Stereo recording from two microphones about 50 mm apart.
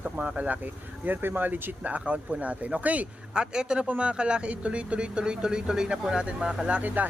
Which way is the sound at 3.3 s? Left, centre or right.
Centre.